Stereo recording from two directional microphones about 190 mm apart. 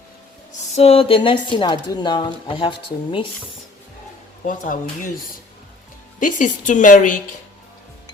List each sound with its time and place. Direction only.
0.8 s a woman's voice: 30° left (ahead or behind)
4.4 s a woman's voice: 45° left (ahead or behind)
6.1 s a woman's voice: 45° left (ahead or behind)